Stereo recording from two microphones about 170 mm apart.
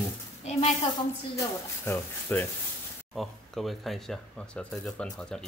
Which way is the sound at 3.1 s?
Centre (ahead or behind).